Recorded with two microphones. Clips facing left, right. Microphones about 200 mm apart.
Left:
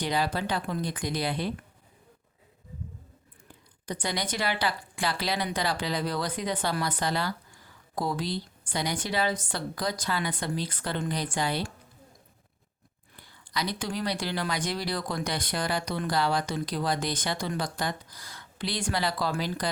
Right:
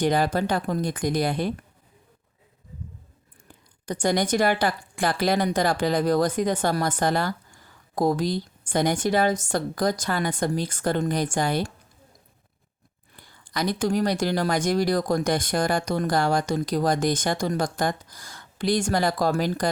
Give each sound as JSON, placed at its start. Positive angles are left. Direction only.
{"t": 0.0, "sound": "speech", "side_deg": -50}
{"t": 3.8, "sound": "speech", "side_deg": -45}
{"t": 13.2, "sound": "speech", "side_deg": -50}